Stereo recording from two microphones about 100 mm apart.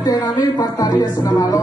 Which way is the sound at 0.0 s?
40° left (ahead or behind).